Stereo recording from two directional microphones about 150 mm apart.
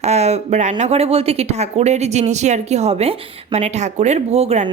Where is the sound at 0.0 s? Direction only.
45° right (ahead or behind).